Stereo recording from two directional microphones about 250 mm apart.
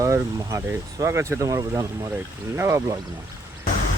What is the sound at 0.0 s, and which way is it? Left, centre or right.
Speech, centre.